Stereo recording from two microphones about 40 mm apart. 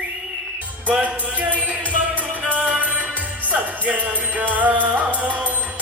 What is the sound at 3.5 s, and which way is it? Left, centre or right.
Music, right.